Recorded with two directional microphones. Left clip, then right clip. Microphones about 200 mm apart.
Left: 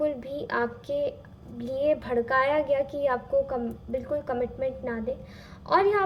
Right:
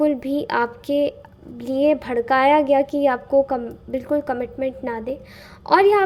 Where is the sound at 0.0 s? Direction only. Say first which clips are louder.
Right 8 dB; 40° right (ahead or behind).